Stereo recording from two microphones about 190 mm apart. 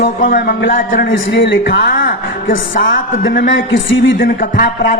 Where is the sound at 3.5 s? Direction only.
80° left.